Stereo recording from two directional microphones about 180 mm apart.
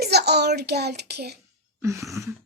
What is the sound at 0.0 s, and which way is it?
Child singing, 65° right (ahead or behind).